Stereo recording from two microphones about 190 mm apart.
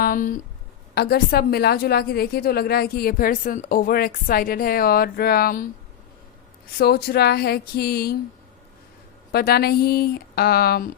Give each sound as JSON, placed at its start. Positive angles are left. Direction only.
{"t": 0.0, "sound": "a woman's voice", "side_deg": 45}
{"t": 6.7, "sound": "speech", "side_deg": 55}
{"t": 9.3, "sound": "a woman's voice", "side_deg": 55}